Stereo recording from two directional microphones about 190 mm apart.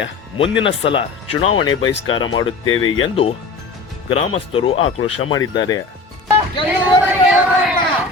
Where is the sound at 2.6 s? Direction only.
90° left.